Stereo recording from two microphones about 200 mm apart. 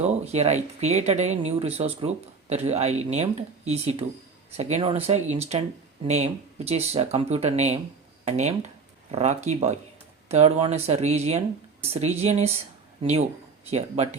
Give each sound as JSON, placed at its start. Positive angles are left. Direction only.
{"t": 0.0, "sound": "speech", "side_deg": -35}